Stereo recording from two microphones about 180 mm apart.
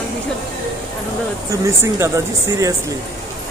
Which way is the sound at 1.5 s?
15° right (ahead or behind).